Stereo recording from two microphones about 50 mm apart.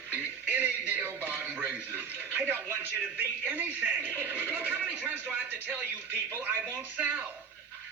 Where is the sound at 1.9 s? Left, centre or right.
Right.